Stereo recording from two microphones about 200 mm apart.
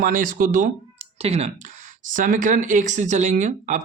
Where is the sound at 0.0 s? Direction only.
40° right (ahead or behind).